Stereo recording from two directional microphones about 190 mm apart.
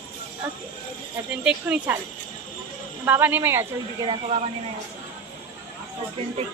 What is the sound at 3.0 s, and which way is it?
Speech, 10° right (ahead or behind).